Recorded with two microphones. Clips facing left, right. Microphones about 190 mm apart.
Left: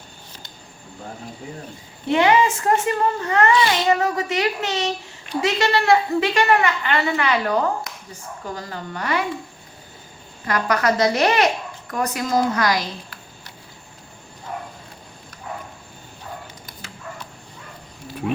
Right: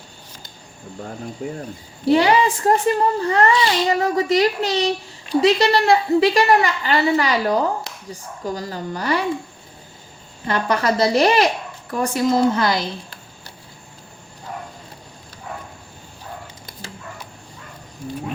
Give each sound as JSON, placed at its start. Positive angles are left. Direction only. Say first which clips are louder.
{"t": 2.0, "sound": "a child's voice", "louder": "right 2 dB", "side_deg": -35}
{"t": 10.4, "sound": "a woman's voice", "louder": "even", "side_deg": -30}